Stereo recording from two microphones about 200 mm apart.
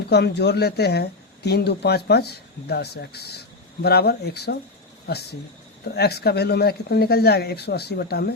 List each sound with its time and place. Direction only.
0.1 s speech: 55° left (ahead or behind)
5.9 s speech: 55° left (ahead or behind)